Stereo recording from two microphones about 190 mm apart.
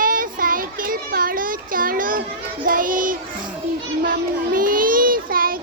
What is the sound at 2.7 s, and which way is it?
Music, 45° right (ahead or behind).